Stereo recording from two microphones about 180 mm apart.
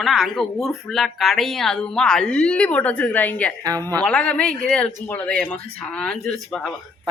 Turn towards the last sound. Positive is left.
turn(degrees=5)  # may be behind; listen again after turning